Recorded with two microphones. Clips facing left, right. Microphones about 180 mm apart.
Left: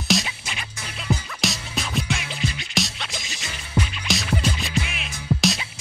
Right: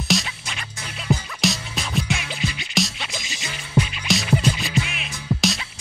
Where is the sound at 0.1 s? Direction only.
Centre (ahead or behind).